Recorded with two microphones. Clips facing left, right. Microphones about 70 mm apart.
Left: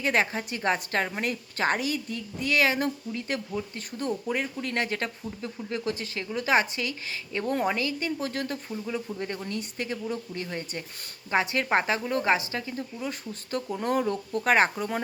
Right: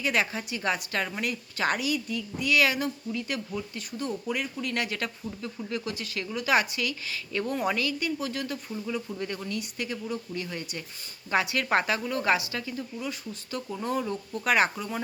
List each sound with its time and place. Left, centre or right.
0.0 s a woman's voice: left